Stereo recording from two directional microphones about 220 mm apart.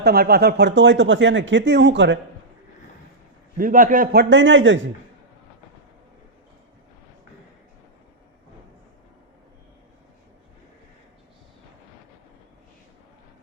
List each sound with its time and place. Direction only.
0.0 s speech: 45° right (ahead or behind)
3.6 s speech: 40° right (ahead or behind); by 4.8 s 55° right (ahead or behind)